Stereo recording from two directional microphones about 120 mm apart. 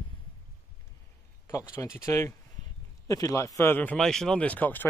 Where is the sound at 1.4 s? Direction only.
25° left (ahead or behind).